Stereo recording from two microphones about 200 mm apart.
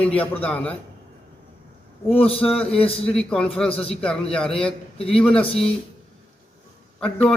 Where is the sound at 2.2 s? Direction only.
30° left (ahead or behind).